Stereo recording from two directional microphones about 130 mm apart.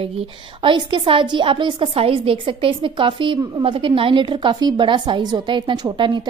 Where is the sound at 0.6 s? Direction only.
40° right (ahead or behind).